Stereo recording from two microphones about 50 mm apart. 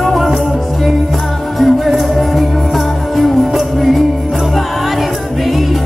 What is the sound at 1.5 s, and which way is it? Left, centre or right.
Music, centre.